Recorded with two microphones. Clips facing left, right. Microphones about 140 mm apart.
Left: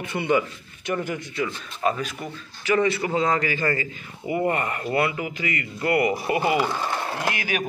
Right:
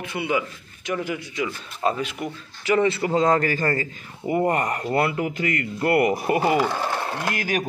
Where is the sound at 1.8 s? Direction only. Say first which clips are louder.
Right 1 dB; 25° right (ahead or behind).